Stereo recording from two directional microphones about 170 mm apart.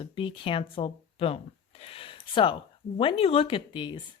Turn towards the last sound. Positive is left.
turn(degrees=25)  # may be behind; listen again after turning